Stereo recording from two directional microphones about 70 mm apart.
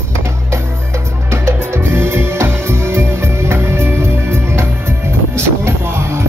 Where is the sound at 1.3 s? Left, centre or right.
Right.